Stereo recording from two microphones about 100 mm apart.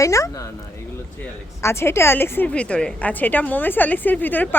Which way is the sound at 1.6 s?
25° left (ahead or behind).